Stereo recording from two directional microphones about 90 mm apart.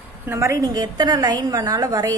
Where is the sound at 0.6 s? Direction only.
50° right (ahead or behind).